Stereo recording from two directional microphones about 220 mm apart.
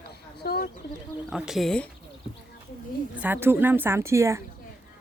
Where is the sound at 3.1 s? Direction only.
10° right (ahead or behind).